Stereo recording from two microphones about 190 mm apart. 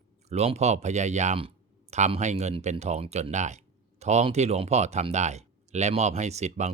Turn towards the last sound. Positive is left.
turn(degrees=-35)  # may be behind; listen again after turning